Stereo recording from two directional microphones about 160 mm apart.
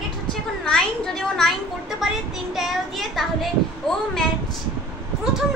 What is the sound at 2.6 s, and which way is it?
A child's voice, centre (ahead or behind).